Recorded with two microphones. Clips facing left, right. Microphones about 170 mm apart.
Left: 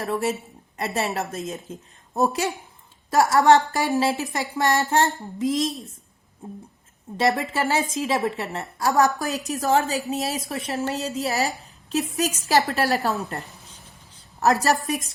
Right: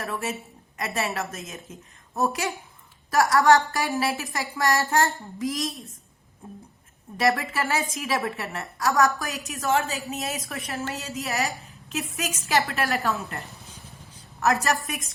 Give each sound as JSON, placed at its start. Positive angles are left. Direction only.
{"t": 0.0, "sound": "a woman's voice", "side_deg": 35}
{"t": 9.1, "sound": "a woman's voice", "side_deg": 35}
{"t": 13.7, "sound": "a sound", "side_deg": -10}
{"t": 14.3, "sound": "a woman's voice", "side_deg": 35}